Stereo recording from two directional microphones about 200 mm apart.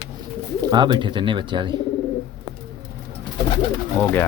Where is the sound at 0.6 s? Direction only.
20° right (ahead or behind).